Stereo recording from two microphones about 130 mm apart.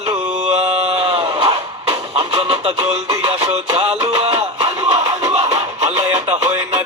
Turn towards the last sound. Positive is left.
turn(degrees=-40)  # may be behind; listen again after turning